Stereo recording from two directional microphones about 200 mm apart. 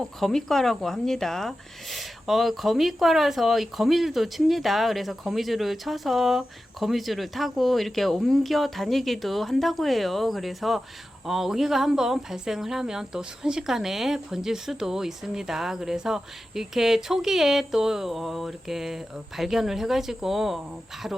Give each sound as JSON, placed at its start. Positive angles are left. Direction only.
{"t": 0.0, "sound": "speech", "side_deg": 0}